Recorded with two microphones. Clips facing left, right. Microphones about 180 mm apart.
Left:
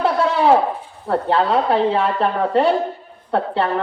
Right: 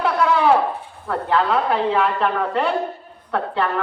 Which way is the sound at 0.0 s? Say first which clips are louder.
Left 1 dB; 30° left (ahead or behind).